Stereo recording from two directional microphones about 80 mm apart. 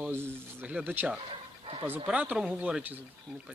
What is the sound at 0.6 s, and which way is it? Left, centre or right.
Speech, centre.